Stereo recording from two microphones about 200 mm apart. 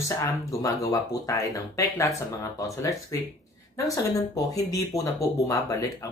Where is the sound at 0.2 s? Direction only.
15° left (ahead or behind).